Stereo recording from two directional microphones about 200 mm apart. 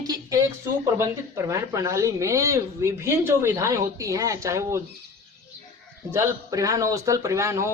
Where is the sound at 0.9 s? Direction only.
15° right (ahead or behind).